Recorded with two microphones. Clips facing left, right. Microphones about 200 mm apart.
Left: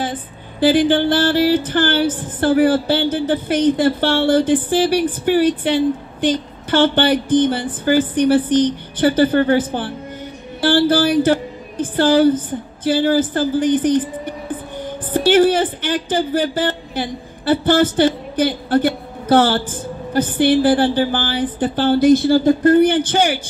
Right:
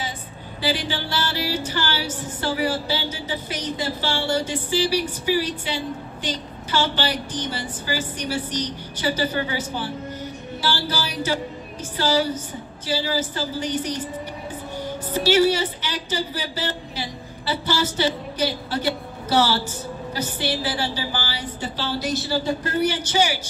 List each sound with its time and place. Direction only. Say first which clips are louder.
0.0 s music: left 8 dB; 55° left (ahead or behind)
11.8 s a woman's voice: left 10 dB; 55° left (ahead or behind)